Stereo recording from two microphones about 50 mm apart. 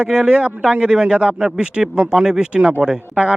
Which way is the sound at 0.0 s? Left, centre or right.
Centre.